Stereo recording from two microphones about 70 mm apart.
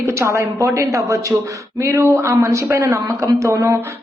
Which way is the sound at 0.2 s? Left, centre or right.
Right.